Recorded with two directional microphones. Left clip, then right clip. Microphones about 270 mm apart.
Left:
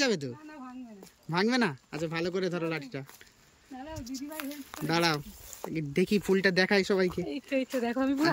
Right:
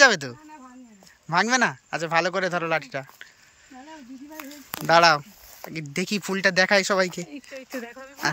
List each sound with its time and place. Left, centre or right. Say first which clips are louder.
0.0 s speech: right 12 dB; centre
4.5 s speech: right 13 dB; centre
7.2 s speech: left 7 dB; left